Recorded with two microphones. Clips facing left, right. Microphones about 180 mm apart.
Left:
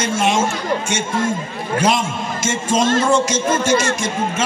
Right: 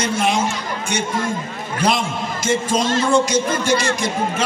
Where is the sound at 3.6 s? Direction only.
45° left (ahead or behind).